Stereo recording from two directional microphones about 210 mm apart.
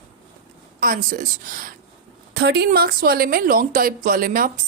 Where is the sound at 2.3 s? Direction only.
50° right (ahead or behind).